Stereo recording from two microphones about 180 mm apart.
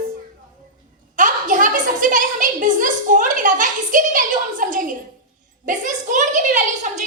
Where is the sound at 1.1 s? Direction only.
45° right (ahead or behind).